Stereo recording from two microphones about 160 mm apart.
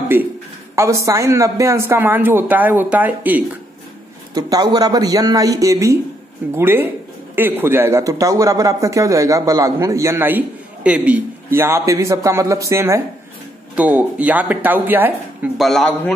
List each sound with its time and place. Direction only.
0.1 s speech: 15° right (ahead or behind)
4.3 s speech: 25° right (ahead or behind)
15.5 s a man's voice: centre (ahead or behind)